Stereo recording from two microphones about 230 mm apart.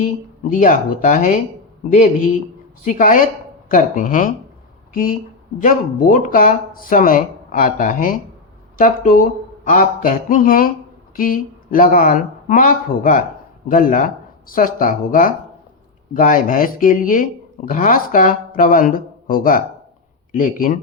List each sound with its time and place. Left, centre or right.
0.0 s speech: left
5.5 s speech: left